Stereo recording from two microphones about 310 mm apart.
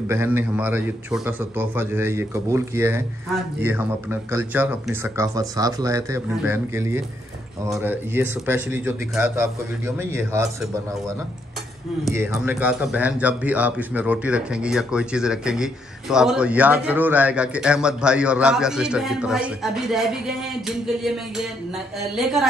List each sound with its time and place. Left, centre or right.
0.1 s speech: centre